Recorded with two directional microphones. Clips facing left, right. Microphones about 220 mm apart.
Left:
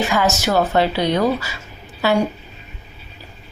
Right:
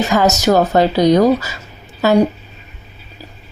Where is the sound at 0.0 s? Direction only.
40° right (ahead or behind).